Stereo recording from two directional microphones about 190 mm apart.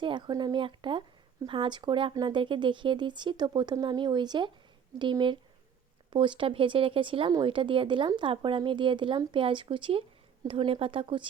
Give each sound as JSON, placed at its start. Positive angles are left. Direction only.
{"t": 0.0, "sound": "speech", "side_deg": -25}